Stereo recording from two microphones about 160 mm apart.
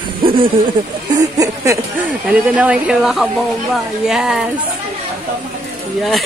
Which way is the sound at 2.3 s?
10° right (ahead or behind).